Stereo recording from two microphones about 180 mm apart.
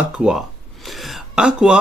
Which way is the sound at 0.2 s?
Centre (ahead or behind).